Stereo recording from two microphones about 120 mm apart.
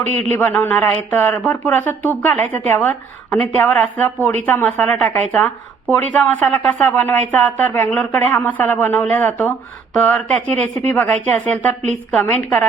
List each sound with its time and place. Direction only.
0.0 s a man's voice: 70° right (ahead or behind)
0.3 s speech: 15° left (ahead or behind)